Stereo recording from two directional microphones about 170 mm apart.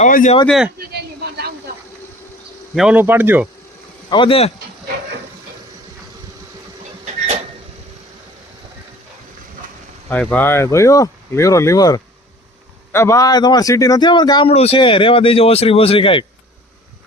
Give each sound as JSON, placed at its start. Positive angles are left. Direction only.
{"t": 0.0, "sound": "speech", "side_deg": 45}
{"t": 0.4, "sound": "speech", "side_deg": 0}
{"t": 2.7, "sound": "speech", "side_deg": -5}
{"t": 4.1, "sound": "speech", "side_deg": 30}
{"t": 10.1, "sound": "speech", "side_deg": 10}
{"t": 14.5, "sound": "speech", "side_deg": 35}